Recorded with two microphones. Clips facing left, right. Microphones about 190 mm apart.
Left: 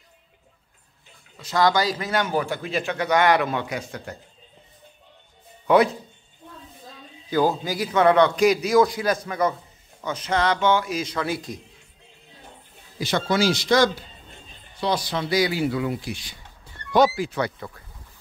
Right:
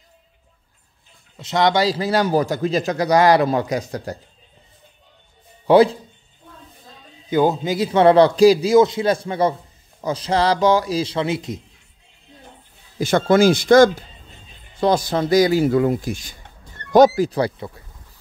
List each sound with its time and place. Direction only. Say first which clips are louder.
1.3 s a man's voice: right 3 dB; 25° right (ahead or behind)
5.7 s a man's voice: right 5 dB; 30° right (ahead or behind)
7.2 s a man's voice: right 4 dB; 20° right (ahead or behind)
13.0 s a man's voice: right 7 dB; 50° right (ahead or behind)
17.6 s a man's voice: right 4 dB; 25° right (ahead or behind)